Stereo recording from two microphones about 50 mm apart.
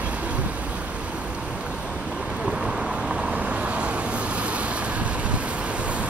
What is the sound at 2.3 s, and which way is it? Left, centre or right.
Vehicle, centre.